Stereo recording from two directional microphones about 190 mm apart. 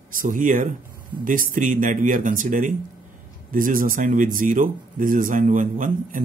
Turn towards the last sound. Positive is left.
turn(degrees=-45)  # may be behind; listen again after turning